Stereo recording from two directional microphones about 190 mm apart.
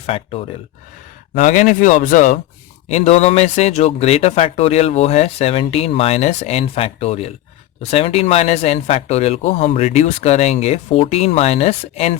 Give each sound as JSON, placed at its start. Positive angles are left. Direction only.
{"t": 0.0, "sound": "speech", "side_deg": 30}
{"t": 1.4, "sound": "speech", "side_deg": 45}